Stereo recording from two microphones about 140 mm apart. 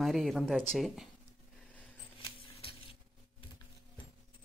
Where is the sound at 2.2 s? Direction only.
40° left (ahead or behind).